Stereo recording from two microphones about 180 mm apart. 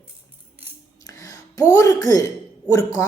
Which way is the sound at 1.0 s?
20° left (ahead or behind).